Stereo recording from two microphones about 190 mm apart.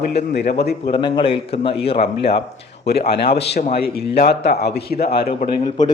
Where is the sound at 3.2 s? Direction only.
60° left (ahead or behind).